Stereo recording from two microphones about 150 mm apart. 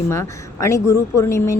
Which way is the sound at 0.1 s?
20° left (ahead or behind).